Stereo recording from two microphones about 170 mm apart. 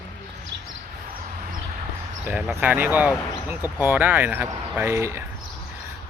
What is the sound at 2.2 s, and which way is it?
Speech, 10° right (ahead or behind).